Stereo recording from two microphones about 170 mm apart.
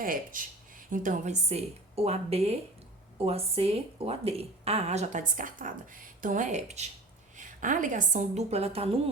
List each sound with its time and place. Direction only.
0.0 s a woman's voice: 55° right (ahead or behind); by 9.0 s 35° right (ahead or behind)